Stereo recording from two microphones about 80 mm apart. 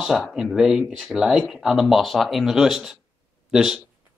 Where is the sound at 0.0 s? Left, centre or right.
Centre.